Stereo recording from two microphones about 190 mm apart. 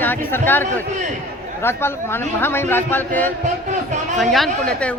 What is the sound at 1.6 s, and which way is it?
A man's voice, 10° left (ahead or behind).